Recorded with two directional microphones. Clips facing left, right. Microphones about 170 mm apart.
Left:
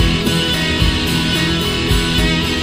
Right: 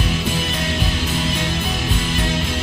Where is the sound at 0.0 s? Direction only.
80° left.